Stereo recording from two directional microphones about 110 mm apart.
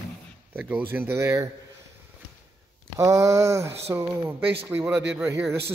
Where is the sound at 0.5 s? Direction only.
15° right (ahead or behind).